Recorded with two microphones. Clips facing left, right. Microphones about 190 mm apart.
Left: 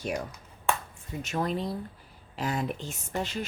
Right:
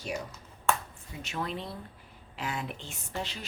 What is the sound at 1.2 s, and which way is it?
A woman's voice, 45° left (ahead or behind).